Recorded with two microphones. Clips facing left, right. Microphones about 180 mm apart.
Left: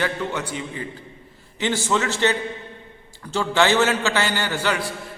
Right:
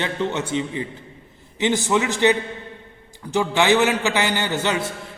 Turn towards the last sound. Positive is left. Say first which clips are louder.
# right 1 dB
turn(degrees=-20)  # may be behind; listen again after turning